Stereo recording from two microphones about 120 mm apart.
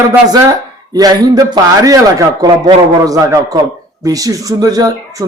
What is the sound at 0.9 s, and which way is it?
A man's voice, 30° right (ahead or behind).